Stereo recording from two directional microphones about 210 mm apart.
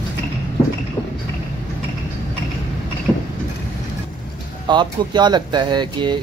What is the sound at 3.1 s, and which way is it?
Vehicle, 5° right (ahead or behind).